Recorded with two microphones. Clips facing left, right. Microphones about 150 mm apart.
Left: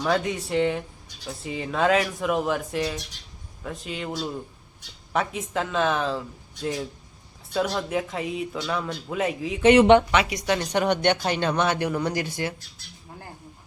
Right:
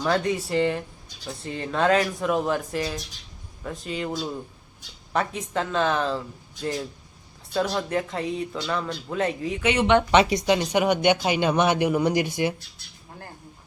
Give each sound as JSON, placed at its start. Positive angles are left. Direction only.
{"t": 0.0, "sound": "speech", "side_deg": 0}
{"t": 10.1, "sound": "speech", "side_deg": -25}
{"t": 10.5, "sound": "speech", "side_deg": -10}